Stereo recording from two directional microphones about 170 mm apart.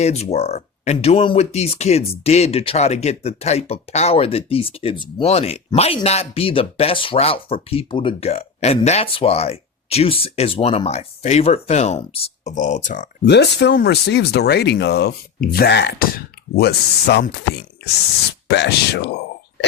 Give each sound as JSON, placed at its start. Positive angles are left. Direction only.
{"t": 0.0, "sound": "speech", "side_deg": 40}
{"t": 13.2, "sound": "speech", "side_deg": 85}
{"t": 18.4, "sound": "speech", "side_deg": 85}